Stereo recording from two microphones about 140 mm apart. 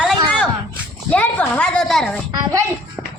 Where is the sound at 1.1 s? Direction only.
10° left (ahead or behind).